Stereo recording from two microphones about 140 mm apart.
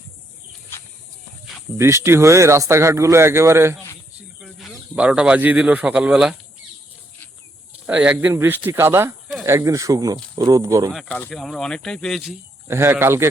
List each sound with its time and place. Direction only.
1.8 s a man's voice: 20° right (ahead or behind)
4.4 s a sound: centre (ahead or behind)
4.9 s speech: 10° right (ahead or behind)
7.9 s a man's voice: 10° right (ahead or behind)
11.2 s speech: 5° left (ahead or behind)
12.6 s speech: 15° right (ahead or behind)